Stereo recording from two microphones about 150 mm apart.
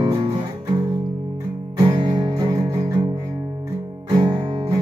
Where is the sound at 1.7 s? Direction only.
25° right (ahead or behind).